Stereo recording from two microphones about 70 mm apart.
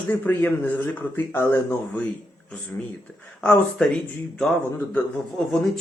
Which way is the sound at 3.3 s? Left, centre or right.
Centre.